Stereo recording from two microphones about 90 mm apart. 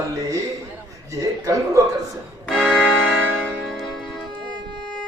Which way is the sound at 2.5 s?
10° right (ahead or behind).